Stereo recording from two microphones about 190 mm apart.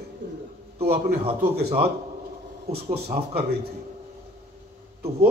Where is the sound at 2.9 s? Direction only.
55° right (ahead or behind).